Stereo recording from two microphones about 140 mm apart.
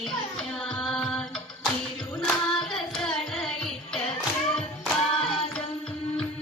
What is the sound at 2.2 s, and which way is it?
Carnatic music, centre (ahead or behind).